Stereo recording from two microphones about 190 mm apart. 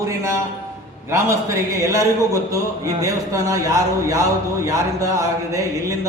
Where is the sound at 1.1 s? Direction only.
15° right (ahead or behind).